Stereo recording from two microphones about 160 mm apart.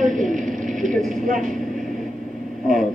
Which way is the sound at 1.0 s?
55° right (ahead or behind).